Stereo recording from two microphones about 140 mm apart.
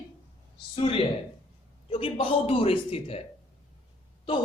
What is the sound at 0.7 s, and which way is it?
A woman's voice, 40° left (ahead or behind).